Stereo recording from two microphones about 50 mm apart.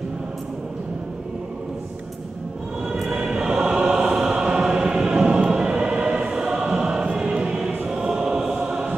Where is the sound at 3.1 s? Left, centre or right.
Centre.